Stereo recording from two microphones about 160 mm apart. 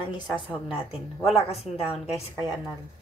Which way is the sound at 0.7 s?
35° left (ahead or behind).